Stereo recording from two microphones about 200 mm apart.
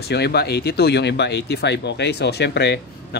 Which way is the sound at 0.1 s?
55° left (ahead or behind).